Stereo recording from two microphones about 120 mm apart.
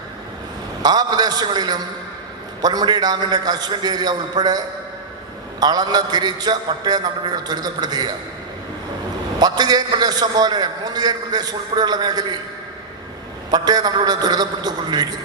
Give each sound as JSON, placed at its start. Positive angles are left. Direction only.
{"t": 0.8, "sound": "a man's voice", "side_deg": -35}
{"t": 9.4, "sound": "a man's voice", "side_deg": -35}
{"t": 13.5, "sound": "a man's voice", "side_deg": -35}